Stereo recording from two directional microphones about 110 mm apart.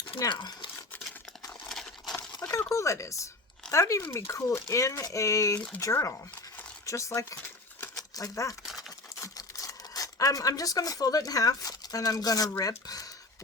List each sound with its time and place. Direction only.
0.2 s speech: 40° left (ahead or behind)
1.6 s crumpling: 5° left (ahead or behind)
2.3 s a sound: 30° left (ahead or behind)
2.7 s speech: 25° left (ahead or behind)
5.5 s speech: 15° left (ahead or behind)
5.8 s speech: 25° left (ahead or behind)
7.8 s a sound: 30° left (ahead or behind)
9.2 s speech: 30° left (ahead or behind)